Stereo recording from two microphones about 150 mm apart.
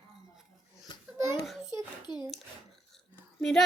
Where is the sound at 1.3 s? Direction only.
Centre (ahead or behind).